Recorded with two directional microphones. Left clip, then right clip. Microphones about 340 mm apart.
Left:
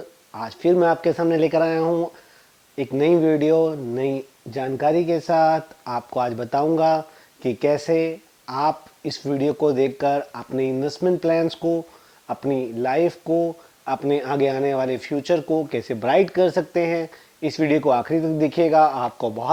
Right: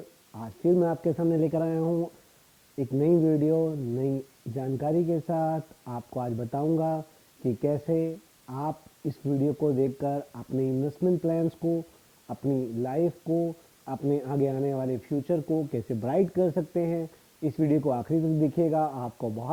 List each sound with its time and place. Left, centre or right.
0.3 s speech: centre
2.7 s speech: left
3.0 s speech: centre
13.2 s speech: left
13.8 s speech: centre